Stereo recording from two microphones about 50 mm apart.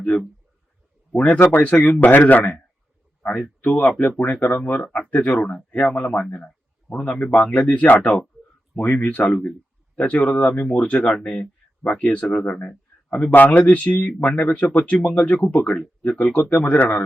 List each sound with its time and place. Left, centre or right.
1.1 s speech: left